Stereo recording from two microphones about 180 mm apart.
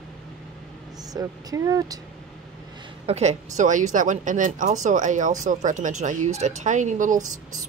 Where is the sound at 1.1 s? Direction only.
20° right (ahead or behind).